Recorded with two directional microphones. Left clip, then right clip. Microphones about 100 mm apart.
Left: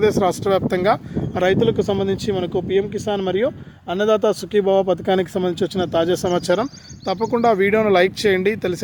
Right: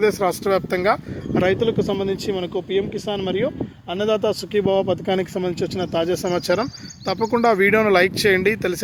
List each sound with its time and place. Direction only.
0.0 s speech: 25° left (ahead or behind)
1.5 s speech: 55° left (ahead or behind)
6.2 s speech: 35° left (ahead or behind)
7.0 s speech: 5° left (ahead or behind)